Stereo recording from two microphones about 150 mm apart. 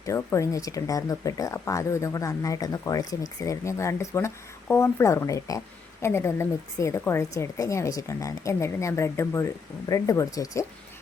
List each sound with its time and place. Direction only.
0.0 s a woman's voice: 20° left (ahead or behind)